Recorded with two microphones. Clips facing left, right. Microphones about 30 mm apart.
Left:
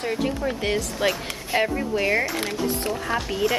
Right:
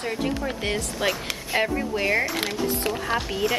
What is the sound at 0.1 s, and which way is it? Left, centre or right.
Speech, centre.